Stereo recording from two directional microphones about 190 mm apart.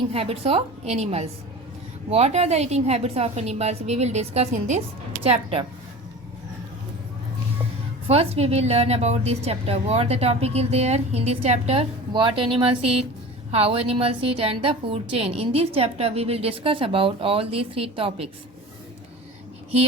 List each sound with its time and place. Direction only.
0.1 s a woman's voice: 30° right (ahead or behind)
8.0 s a woman's voice: 30° right (ahead or behind)